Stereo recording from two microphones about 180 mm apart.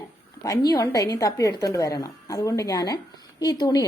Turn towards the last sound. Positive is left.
turn(degrees=20)  # may be behind; listen again after turning